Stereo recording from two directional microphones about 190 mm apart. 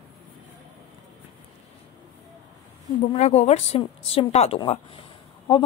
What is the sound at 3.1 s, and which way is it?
A woman's voice, 35° left (ahead or behind).